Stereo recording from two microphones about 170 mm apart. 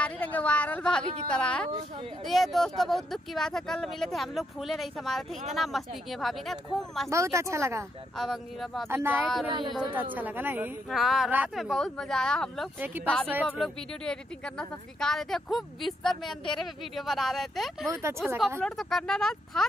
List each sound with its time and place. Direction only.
0.0 s a woman's voice: 10° left (ahead or behind)
7.1 s speech: 15° right (ahead or behind)
8.2 s a woman's voice: centre (ahead or behind)
8.8 s speech: 15° right (ahead or behind)
9.5 s speech: 25° right (ahead or behind)
10.1 s speech: 10° right (ahead or behind)
10.9 s a woman's voice: centre (ahead or behind)